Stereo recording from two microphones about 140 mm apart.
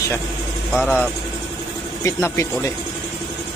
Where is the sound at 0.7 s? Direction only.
5° right (ahead or behind).